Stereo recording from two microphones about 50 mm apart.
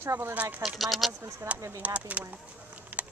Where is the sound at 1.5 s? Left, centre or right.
Right.